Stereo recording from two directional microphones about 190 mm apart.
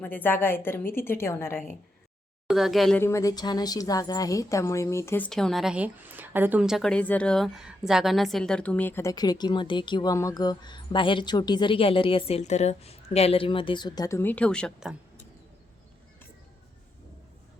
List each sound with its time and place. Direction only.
0.0 s a woman's voice: 10° left (ahead or behind)
2.5 s speech: centre (ahead or behind)
3.0 s a woman's voice: 15° left (ahead or behind)